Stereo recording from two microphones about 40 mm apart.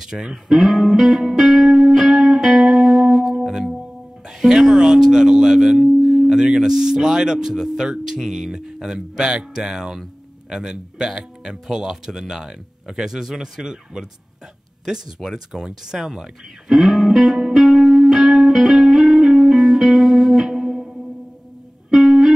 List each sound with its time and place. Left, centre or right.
0.0 s speech: centre
0.5 s music: centre
4.4 s speech: centre
15.3 s music: centre
21.9 s music: centre